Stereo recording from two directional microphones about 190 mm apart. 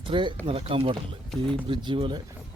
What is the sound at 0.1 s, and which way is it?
Speech, 25° right (ahead or behind).